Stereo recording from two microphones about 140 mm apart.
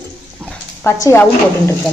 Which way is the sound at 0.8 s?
15° left (ahead or behind).